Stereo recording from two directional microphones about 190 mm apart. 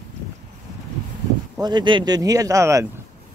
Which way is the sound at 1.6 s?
25° right (ahead or behind).